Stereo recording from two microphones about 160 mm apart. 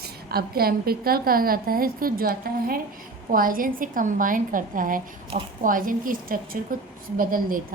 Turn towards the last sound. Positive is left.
turn(degrees=-60)  # may be behind; listen again after turning